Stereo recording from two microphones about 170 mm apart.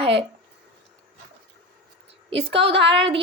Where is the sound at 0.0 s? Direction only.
35° right (ahead or behind).